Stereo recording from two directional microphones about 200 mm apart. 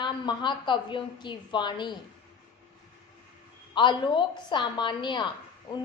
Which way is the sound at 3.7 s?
25° left (ahead or behind).